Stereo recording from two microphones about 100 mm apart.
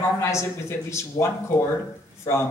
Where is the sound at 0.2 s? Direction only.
30° left (ahead or behind).